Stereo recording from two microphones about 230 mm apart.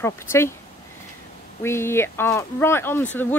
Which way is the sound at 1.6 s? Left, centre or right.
Centre.